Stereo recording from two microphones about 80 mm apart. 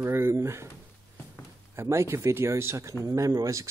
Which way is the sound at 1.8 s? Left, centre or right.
Right.